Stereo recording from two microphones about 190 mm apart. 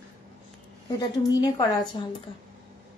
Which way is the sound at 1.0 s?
20° left (ahead or behind).